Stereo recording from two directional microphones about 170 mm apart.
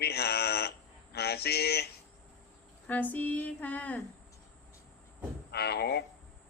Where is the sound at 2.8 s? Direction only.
10° left (ahead or behind).